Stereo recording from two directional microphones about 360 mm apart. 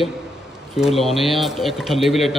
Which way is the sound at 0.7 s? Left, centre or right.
Centre.